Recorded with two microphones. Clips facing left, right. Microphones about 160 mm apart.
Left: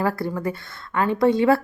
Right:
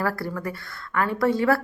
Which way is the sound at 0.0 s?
20° left (ahead or behind).